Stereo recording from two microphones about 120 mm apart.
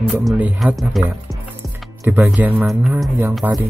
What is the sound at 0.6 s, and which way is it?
Speech, centre (ahead or behind).